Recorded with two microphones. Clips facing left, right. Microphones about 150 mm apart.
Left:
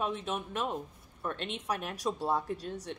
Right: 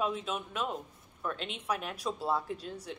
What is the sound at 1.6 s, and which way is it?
Speech, 40° left (ahead or behind).